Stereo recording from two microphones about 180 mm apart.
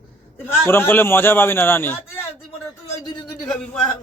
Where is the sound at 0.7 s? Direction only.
10° left (ahead or behind).